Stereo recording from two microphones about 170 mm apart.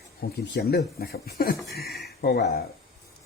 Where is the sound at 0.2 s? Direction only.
65° left (ahead or behind).